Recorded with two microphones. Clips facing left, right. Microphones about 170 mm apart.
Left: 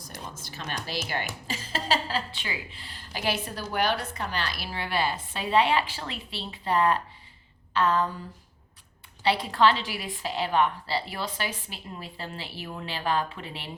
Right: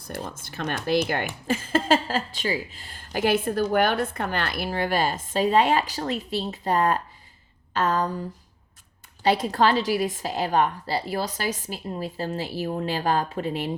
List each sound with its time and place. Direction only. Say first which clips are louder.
0.0 s a woman's voice: right 7 dB; 55° right (ahead or behind)
9.2 s a woman's voice: right 2 dB; 45° right (ahead or behind)